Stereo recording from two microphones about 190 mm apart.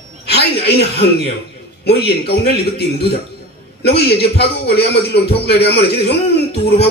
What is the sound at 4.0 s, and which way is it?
Music, 60° left (ahead or behind).